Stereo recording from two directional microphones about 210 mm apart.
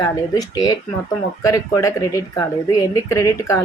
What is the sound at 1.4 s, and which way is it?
Speech, 15° left (ahead or behind).